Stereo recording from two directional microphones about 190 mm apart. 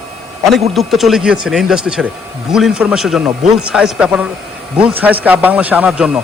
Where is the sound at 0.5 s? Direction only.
Centre (ahead or behind).